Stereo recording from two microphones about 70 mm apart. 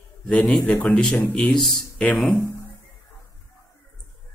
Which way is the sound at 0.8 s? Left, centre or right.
Centre.